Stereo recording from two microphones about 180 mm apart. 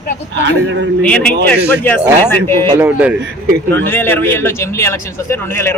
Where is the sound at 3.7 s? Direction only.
10° left (ahead or behind).